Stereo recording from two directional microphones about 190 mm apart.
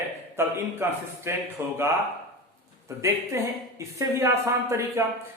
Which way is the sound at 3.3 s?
15° right (ahead or behind).